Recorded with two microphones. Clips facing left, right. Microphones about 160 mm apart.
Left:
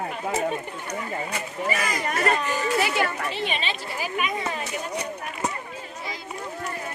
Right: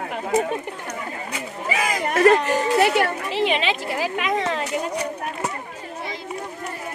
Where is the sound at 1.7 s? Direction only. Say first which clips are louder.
Right 4 dB; 90° right.